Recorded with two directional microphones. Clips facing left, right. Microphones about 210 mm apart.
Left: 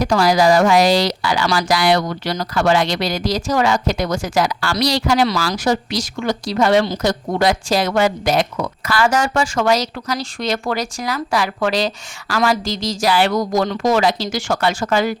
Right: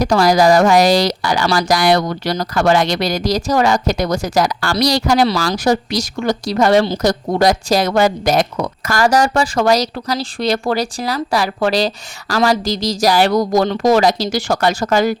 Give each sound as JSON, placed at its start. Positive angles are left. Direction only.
{"t": 0.0, "sound": "speech", "side_deg": -40}